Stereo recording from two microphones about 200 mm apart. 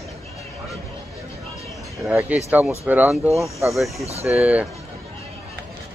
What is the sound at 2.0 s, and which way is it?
Speech, 10° right (ahead or behind).